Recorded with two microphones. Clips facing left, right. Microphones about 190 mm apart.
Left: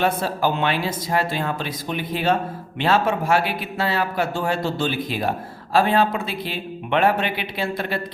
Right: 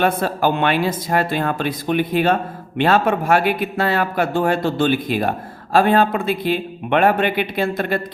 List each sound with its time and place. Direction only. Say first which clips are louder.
0.0 s speech: right 3 dB; 55° right (ahead or behind)